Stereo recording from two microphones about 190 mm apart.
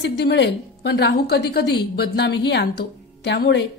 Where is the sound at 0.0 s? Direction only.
65° left (ahead or behind).